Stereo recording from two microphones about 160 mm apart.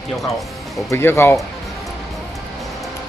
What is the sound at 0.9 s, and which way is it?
Speech, 15° left (ahead or behind).